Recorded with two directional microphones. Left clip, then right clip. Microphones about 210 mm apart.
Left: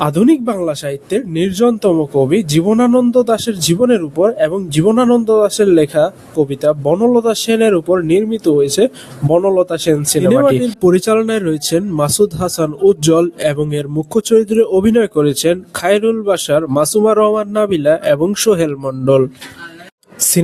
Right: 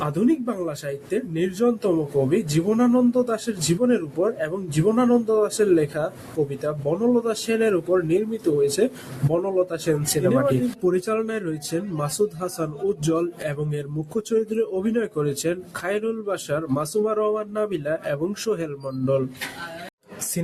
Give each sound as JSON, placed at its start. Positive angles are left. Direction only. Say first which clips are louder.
{"t": 0.0, "sound": "speech", "louder": "left 10 dB", "side_deg": 45}